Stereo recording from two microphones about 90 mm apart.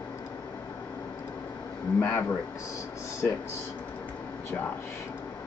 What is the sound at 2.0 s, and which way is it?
Speech, 20° left (ahead or behind).